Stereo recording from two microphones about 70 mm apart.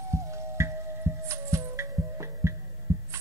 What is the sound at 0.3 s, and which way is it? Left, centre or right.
Music, right.